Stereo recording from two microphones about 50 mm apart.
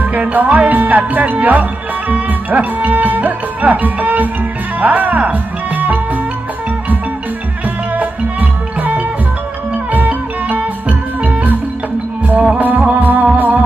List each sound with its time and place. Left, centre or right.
0.0 s music: right
4.8 s speech: right
7.9 s music: right